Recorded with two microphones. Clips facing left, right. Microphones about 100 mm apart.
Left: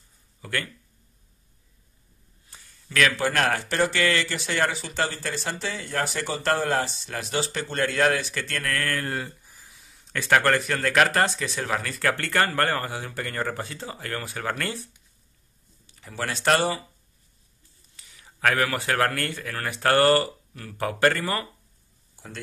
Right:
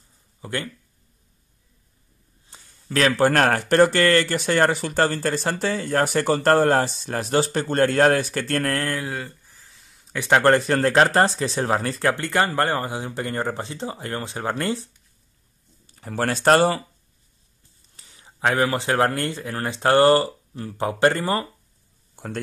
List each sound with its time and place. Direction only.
0.4 s speech: 25° right (ahead or behind)
2.5 s speech: 30° right (ahead or behind)
9.1 s speech: centre (ahead or behind)
9.5 s a sound: 10° left (ahead or behind)
10.1 s speech: 15° right (ahead or behind)
10.4 s speech: 30° right (ahead or behind)
15.9 s speech: 45° right (ahead or behind)
17.9 s speech: 30° right (ahead or behind)
22.1 s a sound: 55° right (ahead or behind)